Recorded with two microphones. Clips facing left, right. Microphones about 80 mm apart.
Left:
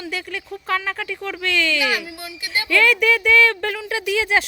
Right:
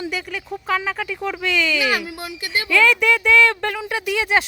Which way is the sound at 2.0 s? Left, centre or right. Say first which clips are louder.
Right 3 dB; right.